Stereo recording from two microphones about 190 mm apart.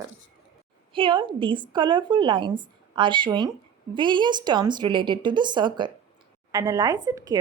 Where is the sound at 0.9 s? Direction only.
25° right (ahead or behind).